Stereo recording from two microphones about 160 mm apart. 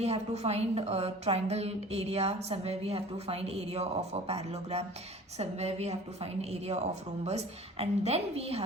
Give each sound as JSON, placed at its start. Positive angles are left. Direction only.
{"t": 0.0, "sound": "a woman's voice", "side_deg": -40}